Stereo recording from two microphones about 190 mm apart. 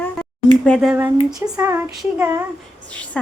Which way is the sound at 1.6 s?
10° right (ahead or behind).